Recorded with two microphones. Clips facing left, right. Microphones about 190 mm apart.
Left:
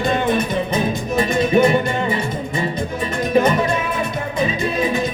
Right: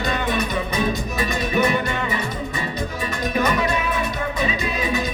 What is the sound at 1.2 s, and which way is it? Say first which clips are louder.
Music: left 7 dB; 25° left (ahead or behind).